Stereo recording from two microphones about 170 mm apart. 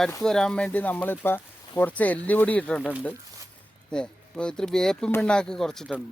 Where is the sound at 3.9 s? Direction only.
5° left (ahead or behind).